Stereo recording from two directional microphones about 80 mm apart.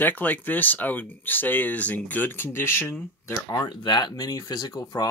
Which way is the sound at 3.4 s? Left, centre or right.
Left.